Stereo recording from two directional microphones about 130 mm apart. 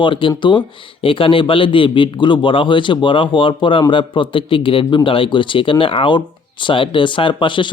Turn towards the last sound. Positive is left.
turn(degrees=40)  # may be behind; listen again after turning